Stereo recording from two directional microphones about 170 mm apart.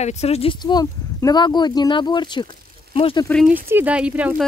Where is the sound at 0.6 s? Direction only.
20° left (ahead or behind).